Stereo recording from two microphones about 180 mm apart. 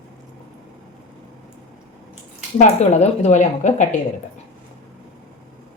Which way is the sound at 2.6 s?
40° left (ahead or behind).